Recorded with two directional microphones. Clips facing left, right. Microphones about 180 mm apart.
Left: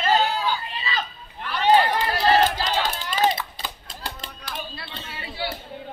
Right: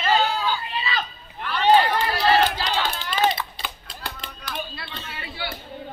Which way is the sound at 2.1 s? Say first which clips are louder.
Left 1 dB; 45° left (ahead or behind).